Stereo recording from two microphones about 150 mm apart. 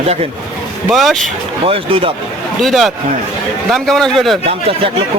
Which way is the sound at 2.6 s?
Centre (ahead or behind).